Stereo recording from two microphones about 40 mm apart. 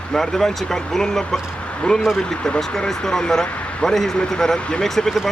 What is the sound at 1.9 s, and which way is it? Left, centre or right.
Speech, left.